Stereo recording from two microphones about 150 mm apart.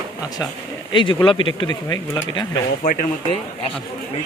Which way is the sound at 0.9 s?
35° left (ahead or behind).